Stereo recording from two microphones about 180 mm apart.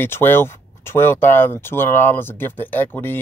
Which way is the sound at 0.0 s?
10° left (ahead or behind).